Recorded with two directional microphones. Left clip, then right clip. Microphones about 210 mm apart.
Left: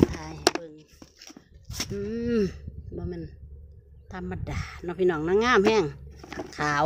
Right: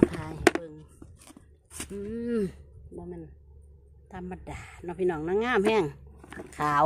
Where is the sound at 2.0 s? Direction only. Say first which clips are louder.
Left 3 dB; 10° left (ahead or behind).